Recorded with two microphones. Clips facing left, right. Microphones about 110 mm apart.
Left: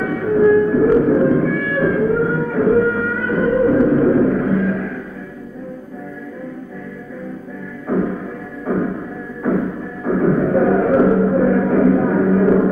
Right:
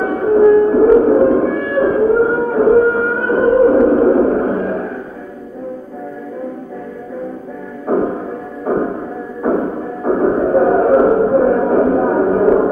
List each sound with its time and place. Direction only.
0.0 s music: 35° right (ahead or behind)
7.9 s music: 35° right (ahead or behind)